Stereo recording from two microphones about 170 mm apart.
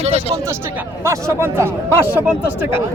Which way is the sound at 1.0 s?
15° right (ahead or behind).